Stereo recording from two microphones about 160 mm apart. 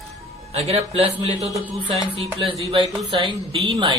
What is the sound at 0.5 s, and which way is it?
Speech, 40° right (ahead or behind).